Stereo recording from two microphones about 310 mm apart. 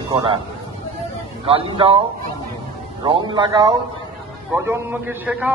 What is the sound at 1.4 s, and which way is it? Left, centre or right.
A man's voice, centre.